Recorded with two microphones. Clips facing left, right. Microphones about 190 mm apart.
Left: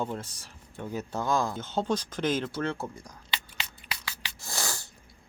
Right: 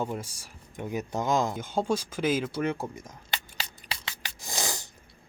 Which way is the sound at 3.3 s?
35° right (ahead or behind).